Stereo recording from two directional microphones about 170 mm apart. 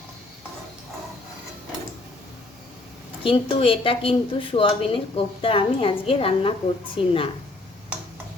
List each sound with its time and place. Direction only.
3.2 s a woman's voice: 30° left (ahead or behind)